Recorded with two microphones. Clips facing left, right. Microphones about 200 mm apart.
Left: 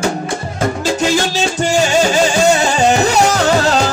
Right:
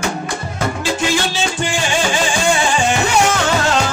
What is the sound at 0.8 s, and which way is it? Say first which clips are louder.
Music: left 3 dB; 40° left (ahead or behind).